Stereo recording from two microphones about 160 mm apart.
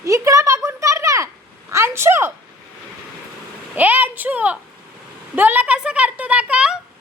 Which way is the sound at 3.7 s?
10° right (ahead or behind).